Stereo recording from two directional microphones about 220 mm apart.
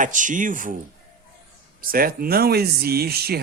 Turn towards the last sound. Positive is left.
turn(degrees=-45)  # may be behind; listen again after turning